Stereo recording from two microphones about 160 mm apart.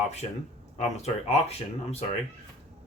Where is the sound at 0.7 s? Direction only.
45° left (ahead or behind).